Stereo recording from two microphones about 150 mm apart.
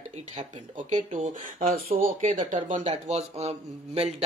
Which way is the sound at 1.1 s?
50° right (ahead or behind).